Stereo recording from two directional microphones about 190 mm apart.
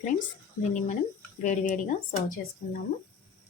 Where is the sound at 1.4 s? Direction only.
40° left (ahead or behind).